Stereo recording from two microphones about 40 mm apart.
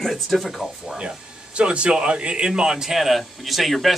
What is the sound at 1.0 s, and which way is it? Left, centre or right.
Speech, right.